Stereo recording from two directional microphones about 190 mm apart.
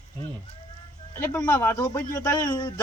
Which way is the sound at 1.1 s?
10° left (ahead or behind).